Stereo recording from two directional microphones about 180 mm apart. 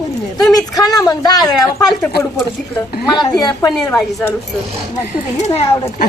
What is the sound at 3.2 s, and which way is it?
Speech, 20° left (ahead or behind).